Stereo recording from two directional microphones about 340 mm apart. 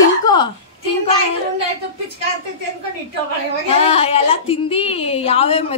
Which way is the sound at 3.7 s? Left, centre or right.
Centre.